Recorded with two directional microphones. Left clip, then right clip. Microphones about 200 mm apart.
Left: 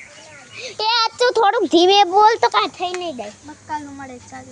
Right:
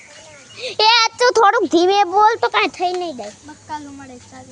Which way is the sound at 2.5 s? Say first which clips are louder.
Right 2 dB; 35° right (ahead or behind).